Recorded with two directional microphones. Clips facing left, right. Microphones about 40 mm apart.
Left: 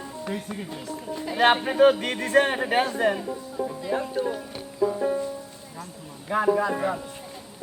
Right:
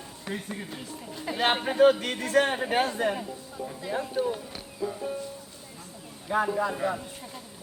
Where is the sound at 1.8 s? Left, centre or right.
Centre.